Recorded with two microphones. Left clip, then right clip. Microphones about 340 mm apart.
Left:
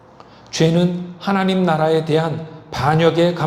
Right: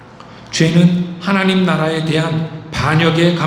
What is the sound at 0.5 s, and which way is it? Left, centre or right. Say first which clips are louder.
A man's voice: right 2 dB; left.